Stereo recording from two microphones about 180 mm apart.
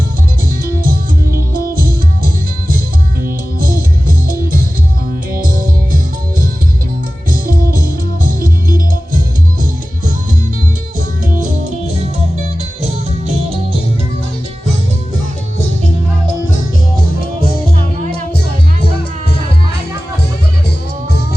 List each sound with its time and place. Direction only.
0.6 s music: 50° right (ahead or behind)
5.3 s music: 50° right (ahead or behind)
7.3 s music: 50° right (ahead or behind)